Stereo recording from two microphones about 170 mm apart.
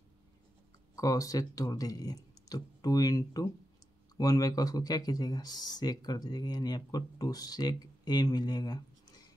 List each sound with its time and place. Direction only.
0.9 s speech: 20° left (ahead or behind)